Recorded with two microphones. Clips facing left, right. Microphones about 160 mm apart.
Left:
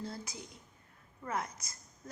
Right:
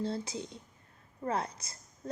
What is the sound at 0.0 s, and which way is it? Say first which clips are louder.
Speech: right 8 dB; 25° right (ahead or behind).